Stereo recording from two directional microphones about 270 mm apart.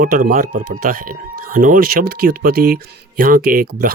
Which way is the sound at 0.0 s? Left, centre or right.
Right.